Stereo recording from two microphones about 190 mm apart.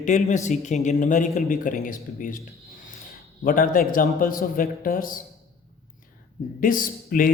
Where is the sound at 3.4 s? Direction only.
45° left (ahead or behind).